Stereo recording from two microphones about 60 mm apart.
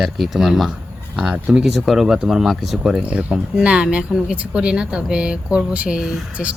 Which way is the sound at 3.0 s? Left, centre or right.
Centre.